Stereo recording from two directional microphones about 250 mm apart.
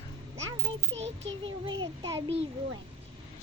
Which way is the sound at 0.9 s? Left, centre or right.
Right.